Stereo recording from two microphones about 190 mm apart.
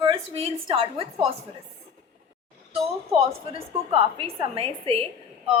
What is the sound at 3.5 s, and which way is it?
A woman's voice, 30° right (ahead or behind).